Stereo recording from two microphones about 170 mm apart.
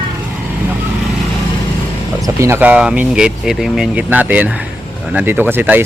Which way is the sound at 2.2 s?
15° right (ahead or behind).